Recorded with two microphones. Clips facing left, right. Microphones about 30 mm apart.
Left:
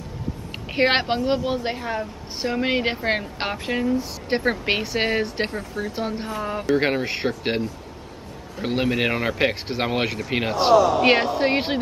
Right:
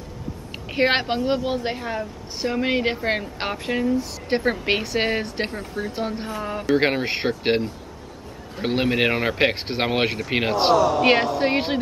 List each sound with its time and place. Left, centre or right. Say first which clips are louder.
0.7 s a woman's voice: left 1 dB; centre
5.6 s speech: even; centre
5.9 s a woman's voice: left 1 dB; centre
6.7 s speech: right 1 dB; centre
10.9 s a woman's voice: even; centre